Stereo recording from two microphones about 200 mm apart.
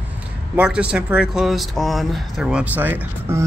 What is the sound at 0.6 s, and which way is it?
Speech, 5° right (ahead or behind).